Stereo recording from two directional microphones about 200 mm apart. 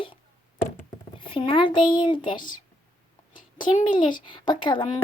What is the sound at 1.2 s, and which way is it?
Speech, 25° left (ahead or behind).